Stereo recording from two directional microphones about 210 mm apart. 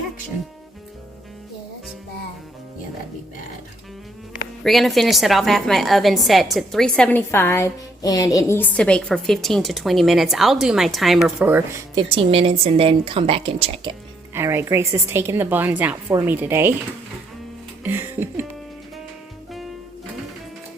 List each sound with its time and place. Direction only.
4.6 s a woman's voice: centre (ahead or behind)
11.9 s a woman's voice: 25° right (ahead or behind)
14.3 s a woman's voice: 10° right (ahead or behind)
17.8 s music: 10° right (ahead or behind)